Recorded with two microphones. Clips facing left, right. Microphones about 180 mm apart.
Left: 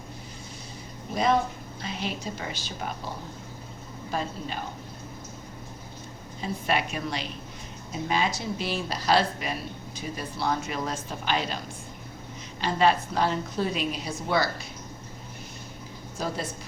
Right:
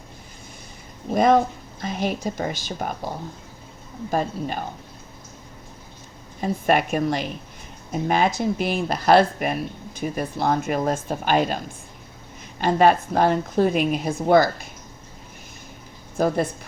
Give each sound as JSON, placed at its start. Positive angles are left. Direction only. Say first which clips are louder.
{"t": 1.1, "sound": "speech", "louder": "right 7 dB", "side_deg": -50}
{"t": 4.1, "sound": "speech", "louder": "right 7 dB", "side_deg": -50}
{"t": 6.4, "sound": "speech", "louder": "right 7 dB", "side_deg": -50}
{"t": 16.1, "sound": "a woman's voice", "louder": "right 10 dB", "side_deg": -55}